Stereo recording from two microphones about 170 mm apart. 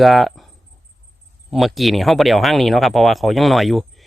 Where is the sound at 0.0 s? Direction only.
Centre (ahead or behind).